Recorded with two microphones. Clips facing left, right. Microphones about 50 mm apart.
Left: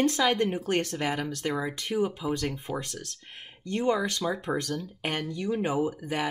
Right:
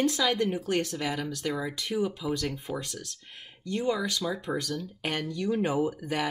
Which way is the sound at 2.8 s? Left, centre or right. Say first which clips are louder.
Left 1 dB; left.